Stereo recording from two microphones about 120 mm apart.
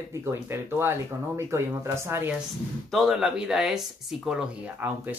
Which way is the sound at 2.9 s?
Centre (ahead or behind).